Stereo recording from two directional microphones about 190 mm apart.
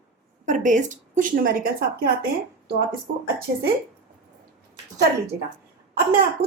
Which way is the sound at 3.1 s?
60° right (ahead or behind).